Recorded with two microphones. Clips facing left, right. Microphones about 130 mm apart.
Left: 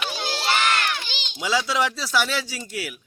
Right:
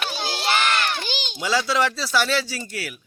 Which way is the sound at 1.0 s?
45° right (ahead or behind).